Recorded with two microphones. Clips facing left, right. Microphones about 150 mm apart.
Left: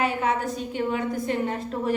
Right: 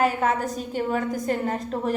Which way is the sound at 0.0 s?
45° right (ahead or behind).